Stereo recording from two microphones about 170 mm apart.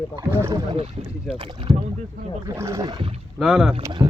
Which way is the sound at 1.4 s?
30° right (ahead or behind).